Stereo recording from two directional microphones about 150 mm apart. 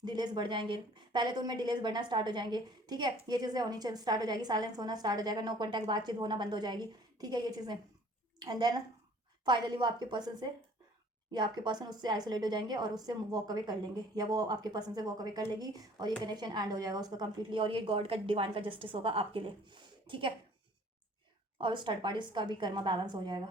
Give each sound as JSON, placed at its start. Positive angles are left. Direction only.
{"t": 0.0, "sound": "a woman's voice", "side_deg": -30}
{"t": 21.6, "sound": "a woman's voice", "side_deg": -30}